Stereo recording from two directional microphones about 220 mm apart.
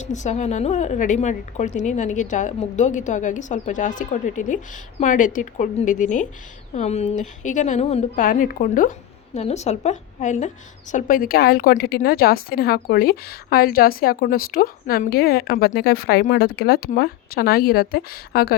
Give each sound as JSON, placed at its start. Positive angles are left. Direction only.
{"t": 0.0, "sound": "a woman's voice", "side_deg": 35}